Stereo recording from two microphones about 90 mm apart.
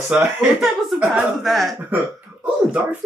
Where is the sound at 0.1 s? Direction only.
10° right (ahead or behind).